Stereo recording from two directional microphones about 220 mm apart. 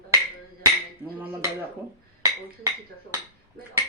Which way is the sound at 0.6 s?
10° right (ahead or behind).